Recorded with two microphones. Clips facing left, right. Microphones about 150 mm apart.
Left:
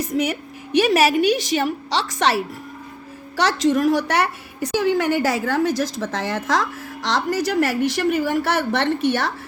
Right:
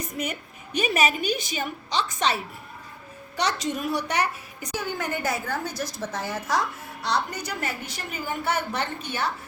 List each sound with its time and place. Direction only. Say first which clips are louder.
0.0 s a woman's voice: left 9 dB; 90° left
3.3 s a woman's voice: left 9 dB; 90° left